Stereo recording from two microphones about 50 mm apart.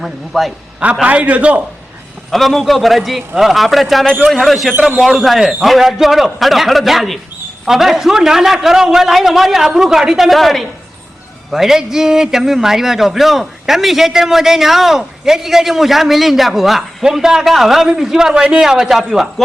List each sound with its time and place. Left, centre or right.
0.0 s a man's voice: centre
1.0 s a man's voice: right
2.3 s a man's voice: centre